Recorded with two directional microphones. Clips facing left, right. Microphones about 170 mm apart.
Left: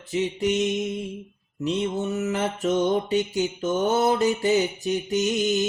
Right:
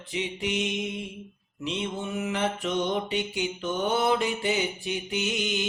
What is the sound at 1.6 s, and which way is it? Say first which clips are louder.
Mantra: left 6 dB; 40° left (ahead or behind).